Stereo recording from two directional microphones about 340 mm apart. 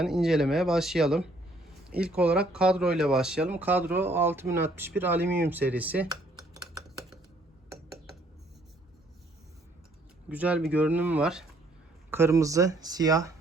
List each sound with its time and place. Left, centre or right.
0.0 s speech: centre
10.2 s speech: centre